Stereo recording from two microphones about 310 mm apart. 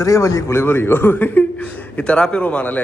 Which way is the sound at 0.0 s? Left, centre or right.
Centre.